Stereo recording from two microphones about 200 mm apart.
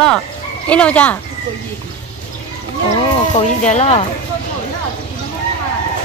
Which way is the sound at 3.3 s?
35° left (ahead or behind).